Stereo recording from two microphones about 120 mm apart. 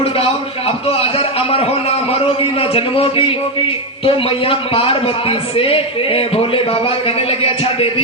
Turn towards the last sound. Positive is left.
turn(degrees=55)  # may be behind; listen again after turning